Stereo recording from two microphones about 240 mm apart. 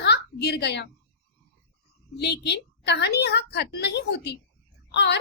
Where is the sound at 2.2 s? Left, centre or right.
Left.